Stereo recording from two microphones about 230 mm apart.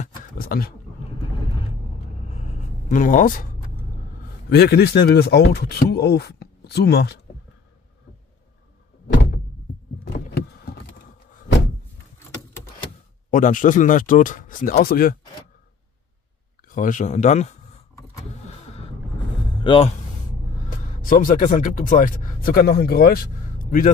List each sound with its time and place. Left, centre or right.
0.0 s wild animals: left
2.3 s writing: left
4.5 s speech: left
9.0 s door: left
10.0 s a sound: left
13.3 s speech: left
16.6 s speech: left
19.6 s speech: left
21.0 s speech: left